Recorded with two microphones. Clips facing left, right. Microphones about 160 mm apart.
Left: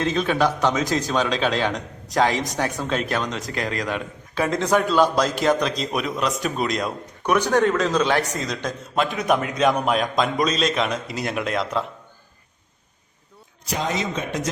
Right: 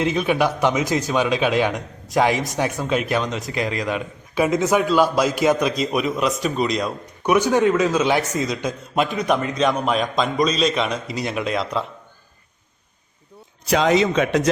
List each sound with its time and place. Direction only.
0.0 s a man's voice: 10° right (ahead or behind)
7.3 s a man's voice: 10° right (ahead or behind)
13.7 s a man's voice: 85° right